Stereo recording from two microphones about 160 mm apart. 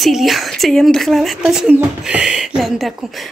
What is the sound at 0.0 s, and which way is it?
Speech, centre (ahead or behind).